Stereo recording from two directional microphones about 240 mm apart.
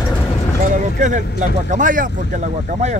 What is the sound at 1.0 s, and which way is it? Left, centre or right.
Speech, right.